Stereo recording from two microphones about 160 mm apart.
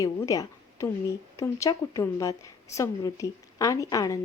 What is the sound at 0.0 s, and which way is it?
A woman's voice, 20° left (ahead or behind).